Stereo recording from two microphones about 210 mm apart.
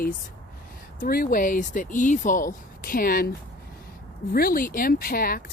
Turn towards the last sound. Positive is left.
turn(degrees=45)  # may be behind; listen again after turning